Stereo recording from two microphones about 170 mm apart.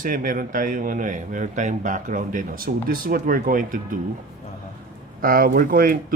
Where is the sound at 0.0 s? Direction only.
55° right (ahead or behind).